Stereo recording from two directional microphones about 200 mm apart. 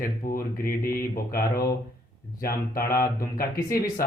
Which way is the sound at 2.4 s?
45° left (ahead or behind).